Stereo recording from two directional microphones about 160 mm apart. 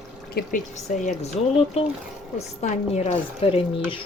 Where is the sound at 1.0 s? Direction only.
45° left (ahead or behind).